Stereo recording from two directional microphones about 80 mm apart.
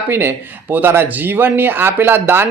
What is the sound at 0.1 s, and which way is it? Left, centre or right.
Speech, right.